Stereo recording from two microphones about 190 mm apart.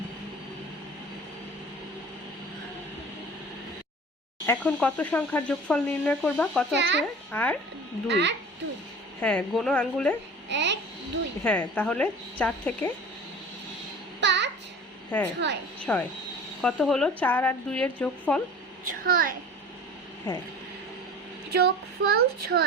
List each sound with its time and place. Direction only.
4.4 s speech: 5° left (ahead or behind)
6.7 s speech: 65° right (ahead or behind)
7.3 s speech: 10° left (ahead or behind)
8.0 s speech: 65° right (ahead or behind)
9.2 s a woman's voice: 5° left (ahead or behind)
10.5 s a child's voice: 65° right (ahead or behind)
11.4 s a woman's voice: 5° left (ahead or behind)
14.2 s a sound: 65° right (ahead or behind)
15.1 s a woman's voice: 10° left (ahead or behind)
18.9 s a child's voice: 50° right (ahead or behind)
20.3 s a woman's voice: 10° left (ahead or behind)
21.5 s speech: 55° right (ahead or behind)